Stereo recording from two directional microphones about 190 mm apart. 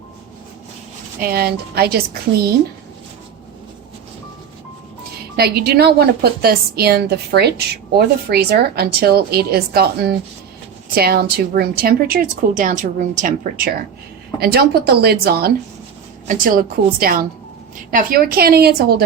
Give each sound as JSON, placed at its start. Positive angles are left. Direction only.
{"t": 1.2, "sound": "a woman's voice", "side_deg": -55}
{"t": 5.4, "sound": "a woman's voice", "side_deg": -55}
{"t": 14.3, "sound": "a woman's voice", "side_deg": -55}
{"t": 16.2, "sound": "a woman's voice", "side_deg": -45}